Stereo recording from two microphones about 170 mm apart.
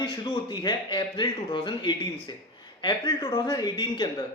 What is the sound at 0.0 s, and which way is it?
Speech, 25° left (ahead or behind).